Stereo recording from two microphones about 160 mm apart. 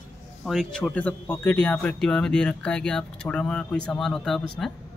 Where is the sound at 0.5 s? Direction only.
Centre (ahead or behind).